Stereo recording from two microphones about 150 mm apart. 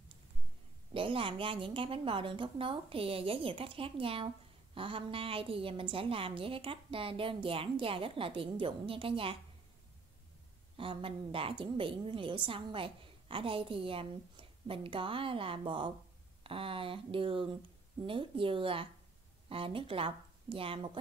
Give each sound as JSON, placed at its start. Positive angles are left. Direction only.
{"t": 0.9, "sound": "a woman's voice", "side_deg": -35}
{"t": 10.8, "sound": "a woman's voice", "side_deg": -35}